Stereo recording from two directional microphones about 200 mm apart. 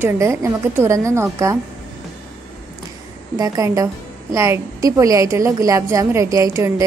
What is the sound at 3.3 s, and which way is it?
A woman's voice, 15° right (ahead or behind).